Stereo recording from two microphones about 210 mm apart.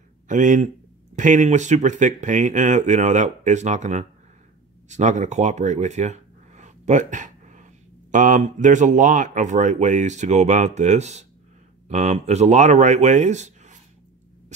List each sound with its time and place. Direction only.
0.3 s speech: 35° right (ahead or behind)